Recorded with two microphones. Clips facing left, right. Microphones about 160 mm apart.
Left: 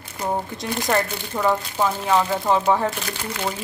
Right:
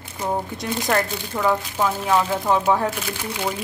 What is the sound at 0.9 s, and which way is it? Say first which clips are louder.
Speech: even; 10° left (ahead or behind).